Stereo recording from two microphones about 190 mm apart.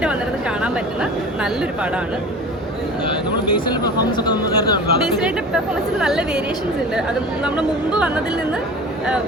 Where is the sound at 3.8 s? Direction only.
20° left (ahead or behind).